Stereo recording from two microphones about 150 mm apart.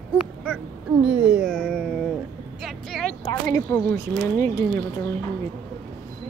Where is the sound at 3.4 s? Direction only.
15° left (ahead or behind).